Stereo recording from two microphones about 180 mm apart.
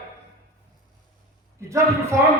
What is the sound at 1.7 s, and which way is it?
Speech, 15° right (ahead or behind).